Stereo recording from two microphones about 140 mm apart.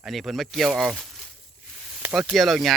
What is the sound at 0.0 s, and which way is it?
Speech, centre (ahead or behind).